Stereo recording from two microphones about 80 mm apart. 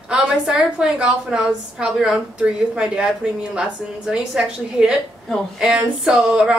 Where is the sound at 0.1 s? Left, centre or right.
Centre.